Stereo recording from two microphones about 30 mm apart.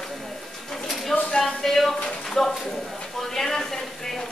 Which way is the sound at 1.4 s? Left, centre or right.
Centre.